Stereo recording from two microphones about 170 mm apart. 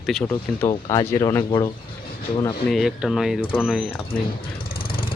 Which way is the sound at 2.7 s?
Centre (ahead or behind).